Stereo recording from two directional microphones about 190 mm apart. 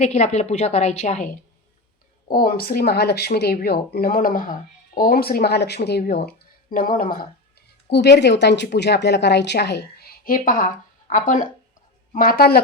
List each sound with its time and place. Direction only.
0.0 s a woman's voice: 35° left (ahead or behind)
2.3 s speech: 50° left (ahead or behind)
7.9 s speech: 60° left (ahead or behind); by 10.7 s 45° left (ahead or behind)
12.1 s speech: 50° left (ahead or behind)